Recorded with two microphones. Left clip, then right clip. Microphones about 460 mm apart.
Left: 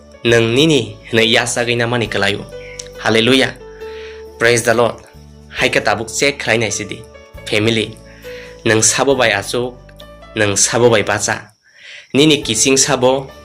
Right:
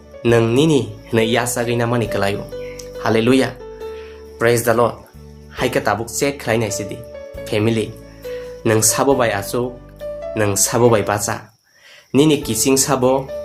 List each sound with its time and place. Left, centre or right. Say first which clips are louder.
0.2 s speech: left 3 dB; right